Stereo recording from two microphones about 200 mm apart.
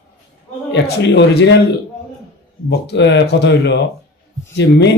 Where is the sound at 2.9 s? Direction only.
60° left (ahead or behind).